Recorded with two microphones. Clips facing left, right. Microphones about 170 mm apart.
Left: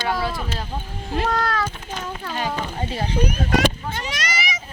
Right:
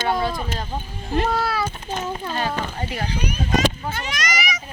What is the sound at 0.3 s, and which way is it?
Speech, 15° right (ahead or behind).